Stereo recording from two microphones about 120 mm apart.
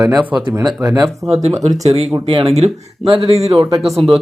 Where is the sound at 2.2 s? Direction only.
60° right (ahead or behind).